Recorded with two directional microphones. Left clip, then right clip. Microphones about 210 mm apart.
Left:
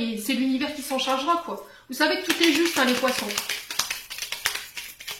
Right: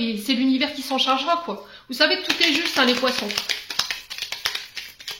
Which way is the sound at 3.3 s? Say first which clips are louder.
Right 3 dB; 30° right (ahead or behind).